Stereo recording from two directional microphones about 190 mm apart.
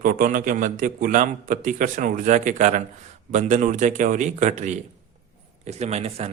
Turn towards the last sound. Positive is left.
turn(degrees=-35)  # may be behind; listen again after turning